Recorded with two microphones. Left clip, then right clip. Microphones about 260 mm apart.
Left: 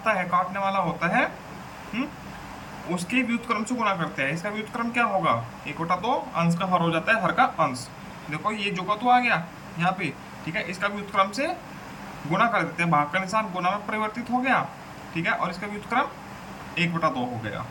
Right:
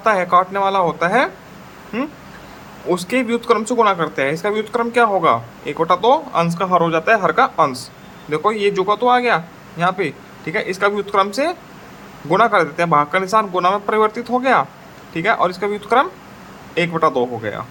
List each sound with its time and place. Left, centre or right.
0.0 s speech: right
2.9 s speech: centre